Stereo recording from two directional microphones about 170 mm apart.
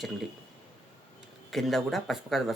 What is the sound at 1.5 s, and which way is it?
Speech, centre (ahead or behind).